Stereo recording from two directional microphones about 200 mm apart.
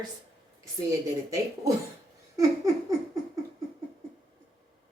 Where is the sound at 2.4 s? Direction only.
15° right (ahead or behind).